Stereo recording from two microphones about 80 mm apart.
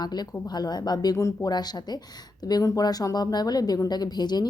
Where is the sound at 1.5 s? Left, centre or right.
Left.